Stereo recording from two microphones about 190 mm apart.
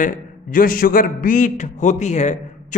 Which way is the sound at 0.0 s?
45° left (ahead or behind).